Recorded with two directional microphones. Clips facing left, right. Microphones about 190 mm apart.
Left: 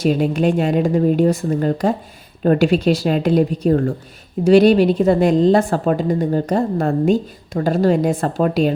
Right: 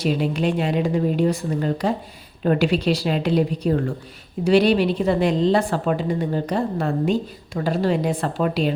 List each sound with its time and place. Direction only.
0.0 s a woman's voice: 45° left (ahead or behind)